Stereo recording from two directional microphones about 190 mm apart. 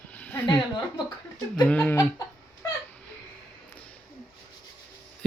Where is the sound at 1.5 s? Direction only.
5° left (ahead or behind).